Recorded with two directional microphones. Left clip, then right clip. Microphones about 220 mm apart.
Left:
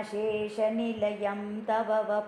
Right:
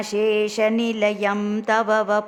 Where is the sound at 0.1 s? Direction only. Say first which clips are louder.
Right 12 dB; 30° right (ahead or behind).